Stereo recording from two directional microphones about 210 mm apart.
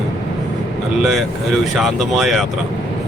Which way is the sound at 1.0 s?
Centre (ahead or behind).